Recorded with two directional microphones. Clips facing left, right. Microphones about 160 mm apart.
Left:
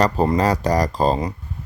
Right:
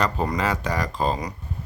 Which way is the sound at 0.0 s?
35° left (ahead or behind).